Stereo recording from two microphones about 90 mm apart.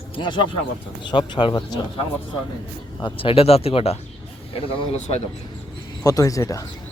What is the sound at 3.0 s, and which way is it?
Speech, 85° left.